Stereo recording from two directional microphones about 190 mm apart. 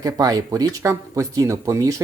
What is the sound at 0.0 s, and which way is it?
Speech, 20° right (ahead or behind).